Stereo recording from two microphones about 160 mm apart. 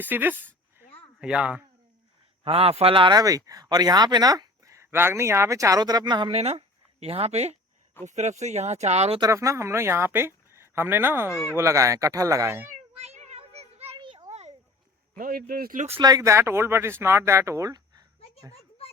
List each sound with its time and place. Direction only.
0.0 s speech: 10° right (ahead or behind)
2.4 s speech: 40° right (ahead or behind)
6.3 s speech: 40° right (ahead or behind)
9.2 s speech: 20° right (ahead or behind)
11.3 s speech: 15° left (ahead or behind)
11.5 s speech: 20° right (ahead or behind)
13.0 s child singing: 45° right (ahead or behind)
13.9 s children playing: 30° right (ahead or behind)
14.3 s a sound: 45° right (ahead or behind)
15.2 s speech: 70° right (ahead or behind)
16.0 s speech: 25° right (ahead or behind)